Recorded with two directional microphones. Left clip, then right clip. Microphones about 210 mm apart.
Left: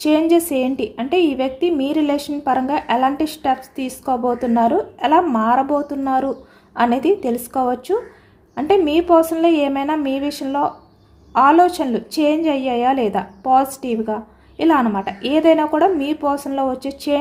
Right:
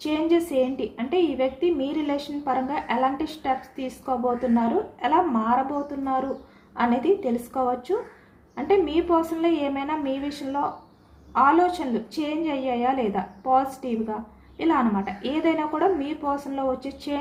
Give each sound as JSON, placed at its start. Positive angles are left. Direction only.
{"t": 0.0, "sound": "a woman's voice", "side_deg": 55}
{"t": 6.7, "sound": "a woman's voice", "side_deg": 55}